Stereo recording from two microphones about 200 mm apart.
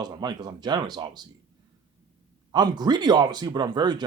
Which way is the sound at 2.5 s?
20° right (ahead or behind).